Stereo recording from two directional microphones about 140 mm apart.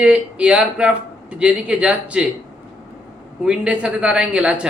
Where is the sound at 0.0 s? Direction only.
10° right (ahead or behind).